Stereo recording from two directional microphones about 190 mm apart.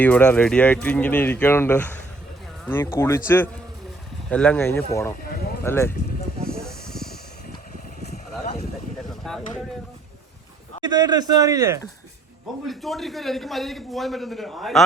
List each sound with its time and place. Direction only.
0.0 s speech: 5° left (ahead or behind)
6.4 s snake: 5° left (ahead or behind)
8.1 s a sound: 40° left (ahead or behind)
9.2 s boat: centre (ahead or behind)
10.8 s a man's voice: 20° right (ahead or behind)
12.6 s a man's voice: centre (ahead or behind)